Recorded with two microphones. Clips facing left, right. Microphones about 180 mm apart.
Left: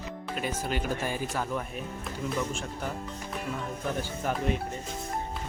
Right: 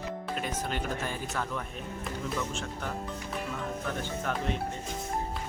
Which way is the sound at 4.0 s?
10° left (ahead or behind).